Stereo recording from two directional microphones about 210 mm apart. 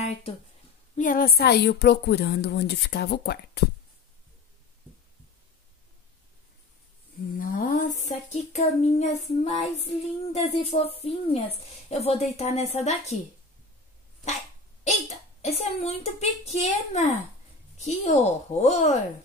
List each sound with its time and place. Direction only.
0.0 s speech: 30° left (ahead or behind)
0.9 s a woman's voice: 40° left (ahead or behind)
7.3 s child singing: 40° left (ahead or behind)
14.9 s child singing: 30° left (ahead or behind)